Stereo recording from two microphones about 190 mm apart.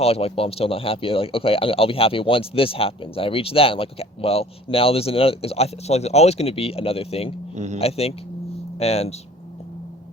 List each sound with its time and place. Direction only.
0.0 s speech: 30° left (ahead or behind)
7.5 s speech: 40° right (ahead or behind)
7.8 s speech: 30° left (ahead or behind)